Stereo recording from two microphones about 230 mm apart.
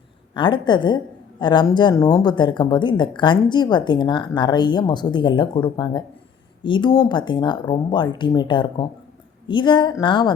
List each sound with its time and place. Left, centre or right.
0.3 s speech: centre